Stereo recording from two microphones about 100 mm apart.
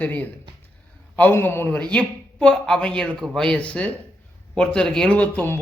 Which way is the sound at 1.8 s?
10° left (ahead or behind).